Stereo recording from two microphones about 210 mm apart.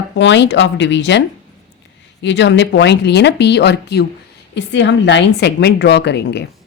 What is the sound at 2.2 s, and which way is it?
Speech, 55° left (ahead or behind).